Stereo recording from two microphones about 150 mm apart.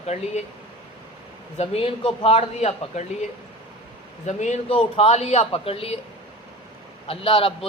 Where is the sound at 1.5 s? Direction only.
40° left (ahead or behind).